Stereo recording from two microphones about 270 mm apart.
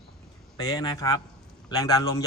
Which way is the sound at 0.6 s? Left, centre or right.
Centre.